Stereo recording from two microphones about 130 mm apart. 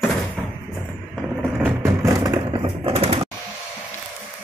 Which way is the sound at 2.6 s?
45° right (ahead or behind).